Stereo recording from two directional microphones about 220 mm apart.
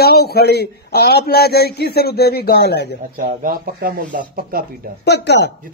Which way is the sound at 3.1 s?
35° right (ahead or behind).